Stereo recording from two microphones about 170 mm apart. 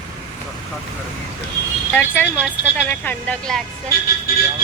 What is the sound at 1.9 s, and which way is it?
Speech, 10° left (ahead or behind).